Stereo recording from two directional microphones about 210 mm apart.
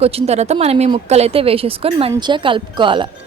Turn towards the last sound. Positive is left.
turn(degrees=-25)  # may be behind; listen again after turning